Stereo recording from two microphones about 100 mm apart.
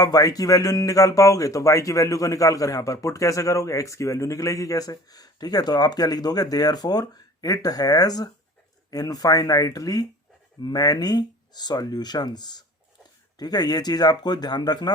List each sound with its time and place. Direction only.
0.0 s speech: 40° left (ahead or behind)